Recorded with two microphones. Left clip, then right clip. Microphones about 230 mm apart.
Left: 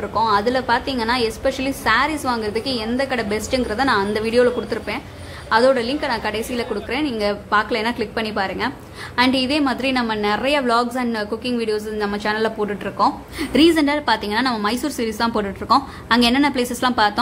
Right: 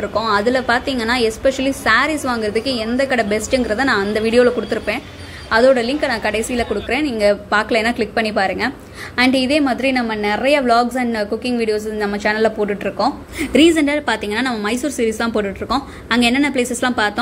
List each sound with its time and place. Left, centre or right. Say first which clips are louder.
0.1 s a woman's voice: even; centre